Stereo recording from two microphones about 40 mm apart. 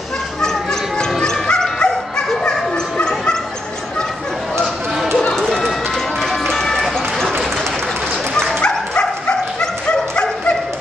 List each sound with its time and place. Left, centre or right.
0.4 s dog: centre
3.0 s bow-wow: centre
4.6 s a sound: centre
6.5 s run: centre
8.5 s bow-wow: left